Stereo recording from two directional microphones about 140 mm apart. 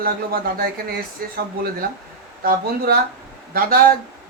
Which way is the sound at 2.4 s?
90° right.